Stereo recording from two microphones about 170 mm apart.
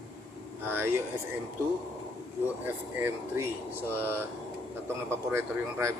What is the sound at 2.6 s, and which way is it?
Speech, 10° right (ahead or behind).